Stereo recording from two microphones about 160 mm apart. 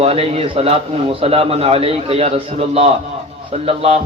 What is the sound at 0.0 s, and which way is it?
A man's voice, 40° right (ahead or behind).